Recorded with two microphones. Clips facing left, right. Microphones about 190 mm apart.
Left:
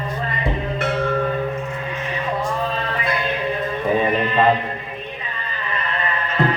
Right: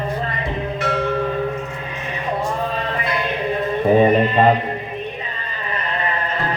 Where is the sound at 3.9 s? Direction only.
35° right (ahead or behind).